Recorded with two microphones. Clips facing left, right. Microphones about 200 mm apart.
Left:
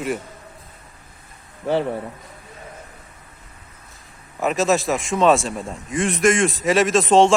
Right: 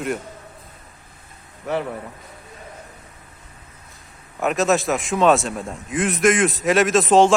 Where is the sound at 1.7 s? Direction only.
30° left (ahead or behind).